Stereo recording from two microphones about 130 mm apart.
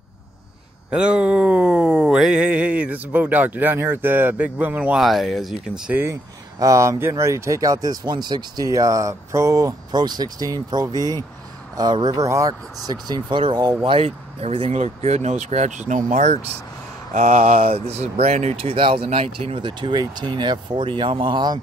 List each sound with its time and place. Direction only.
0.9 s a sound: 10° right (ahead or behind)
5.0 s speech: centre (ahead or behind)
6.6 s speech: 25° right (ahead or behind)
13.8 s speech: 50° right (ahead or behind)
14.7 s speech: 60° right (ahead or behind); by 21.5 s 35° right (ahead or behind)